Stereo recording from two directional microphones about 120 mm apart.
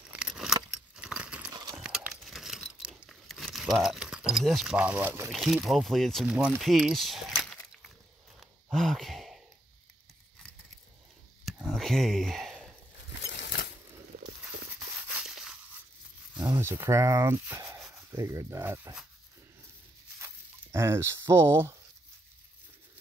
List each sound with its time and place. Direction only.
0.1 s keys jangling: 5° right (ahead or behind)
1.5 s horse: 35° right (ahead or behind)
1.8 s a sound: 5° right (ahead or behind)
3.8 s speech: 5° right (ahead or behind)
4.7 s speech: 15° right (ahead or behind)
5.3 s speech: centre (ahead or behind)
6.2 s speech: 15° right (ahead or behind)
6.6 s speech: centre (ahead or behind)
8.4 s sigh: 5° left (ahead or behind)
11.6 s a sound: 5° left (ahead or behind)
15.1 s a sound: 5° right (ahead or behind)
16.5 s speech: 20° right (ahead or behind)
20.2 s a sound: 20° right (ahead or behind)